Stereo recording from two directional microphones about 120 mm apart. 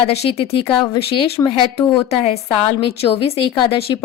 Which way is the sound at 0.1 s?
55° left (ahead or behind).